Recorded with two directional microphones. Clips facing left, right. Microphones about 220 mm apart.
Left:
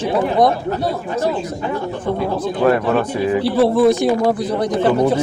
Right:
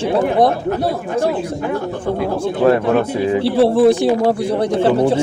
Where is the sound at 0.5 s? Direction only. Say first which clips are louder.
Right 2 dB; 50° right (ahead or behind).